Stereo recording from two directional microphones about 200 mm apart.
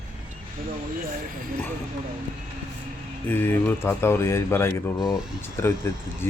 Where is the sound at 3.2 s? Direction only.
10° left (ahead or behind).